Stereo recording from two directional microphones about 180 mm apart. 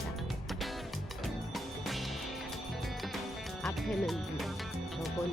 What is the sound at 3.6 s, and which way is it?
Music, centre (ahead or behind).